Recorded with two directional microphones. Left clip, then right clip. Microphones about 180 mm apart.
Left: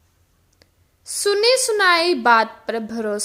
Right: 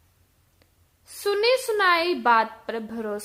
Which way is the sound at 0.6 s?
20° left (ahead or behind).